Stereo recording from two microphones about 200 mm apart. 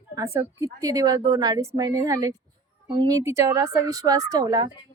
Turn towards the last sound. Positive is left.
turn(degrees=-20)  # may be behind; listen again after turning